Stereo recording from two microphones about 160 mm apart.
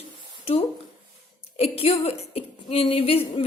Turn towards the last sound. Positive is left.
turn(degrees=35)  # may be behind; listen again after turning